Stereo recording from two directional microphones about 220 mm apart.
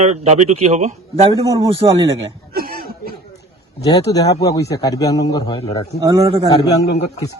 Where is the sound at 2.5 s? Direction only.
45° right (ahead or behind).